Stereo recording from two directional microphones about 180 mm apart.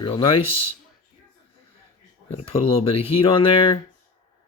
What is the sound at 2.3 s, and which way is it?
Speech, 35° left (ahead or behind).